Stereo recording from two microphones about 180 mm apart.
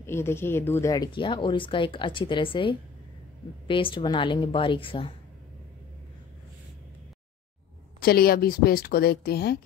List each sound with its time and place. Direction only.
0.0 s speech: 15° left (ahead or behind); by 5.1 s 30° left (ahead or behind)
8.0 s a woman's voice: 60° left (ahead or behind)